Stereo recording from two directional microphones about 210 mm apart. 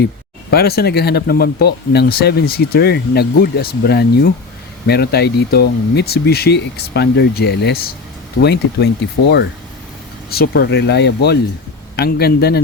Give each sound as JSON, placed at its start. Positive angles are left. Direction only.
{"t": 0.5, "sound": "speech", "side_deg": 50}